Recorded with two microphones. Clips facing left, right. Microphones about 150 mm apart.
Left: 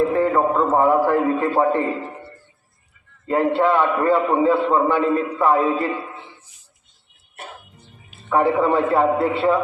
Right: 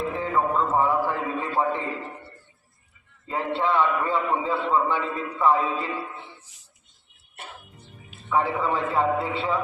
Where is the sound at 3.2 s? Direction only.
50° left (ahead or behind).